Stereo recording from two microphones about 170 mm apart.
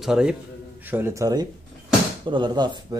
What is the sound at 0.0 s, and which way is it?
A man's voice, 5° right (ahead or behind).